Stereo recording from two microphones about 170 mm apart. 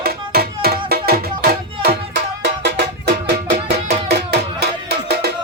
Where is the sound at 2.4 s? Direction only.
75° right (ahead or behind).